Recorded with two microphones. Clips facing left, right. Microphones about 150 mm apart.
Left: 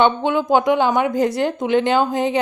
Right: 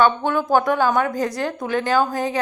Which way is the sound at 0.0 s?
20° left (ahead or behind).